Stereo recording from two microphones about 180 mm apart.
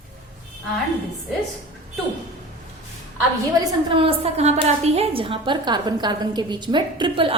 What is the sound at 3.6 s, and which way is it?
A woman's voice, 30° right (ahead or behind).